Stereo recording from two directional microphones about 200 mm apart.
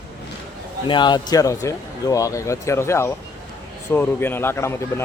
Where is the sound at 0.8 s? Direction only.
25° left (ahead or behind).